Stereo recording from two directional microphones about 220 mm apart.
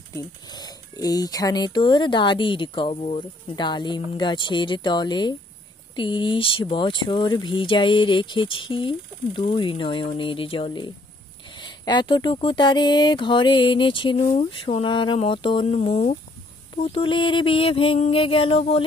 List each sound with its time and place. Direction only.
0.1 s speech: 20° left (ahead or behind)